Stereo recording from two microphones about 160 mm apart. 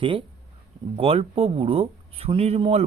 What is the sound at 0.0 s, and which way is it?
Speech, 30° right (ahead or behind).